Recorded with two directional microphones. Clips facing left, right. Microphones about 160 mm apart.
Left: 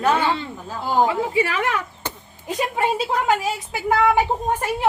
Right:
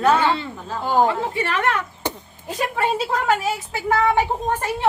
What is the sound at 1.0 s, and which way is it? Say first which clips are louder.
A woman's voice: left 4 dB; 10° left (ahead or behind).